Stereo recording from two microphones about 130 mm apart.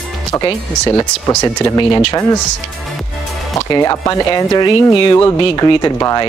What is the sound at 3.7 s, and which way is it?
Speech, 30° left (ahead or behind).